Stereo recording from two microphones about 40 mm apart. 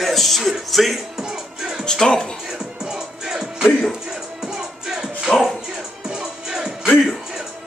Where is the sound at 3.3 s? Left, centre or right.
Centre.